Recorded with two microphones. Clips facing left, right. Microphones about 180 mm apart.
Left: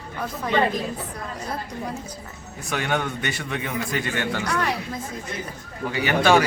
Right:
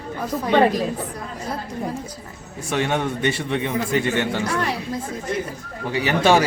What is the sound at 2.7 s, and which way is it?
A man's voice, 30° right (ahead or behind).